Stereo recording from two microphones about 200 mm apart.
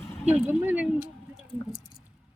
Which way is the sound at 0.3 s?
10° right (ahead or behind).